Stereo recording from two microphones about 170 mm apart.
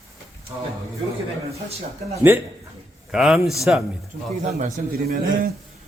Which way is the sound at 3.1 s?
5° right (ahead or behind).